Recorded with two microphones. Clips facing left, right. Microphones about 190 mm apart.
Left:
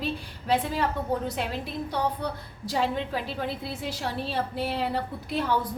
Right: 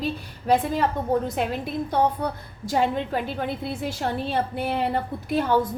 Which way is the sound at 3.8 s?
50° right (ahead or behind).